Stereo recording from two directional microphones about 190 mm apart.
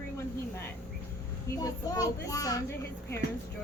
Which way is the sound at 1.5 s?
20° left (ahead or behind).